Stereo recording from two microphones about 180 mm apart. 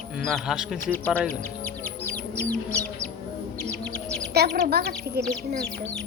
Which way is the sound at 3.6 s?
5° left (ahead or behind).